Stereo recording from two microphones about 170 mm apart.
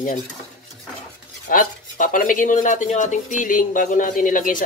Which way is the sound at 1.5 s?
55° left (ahead or behind).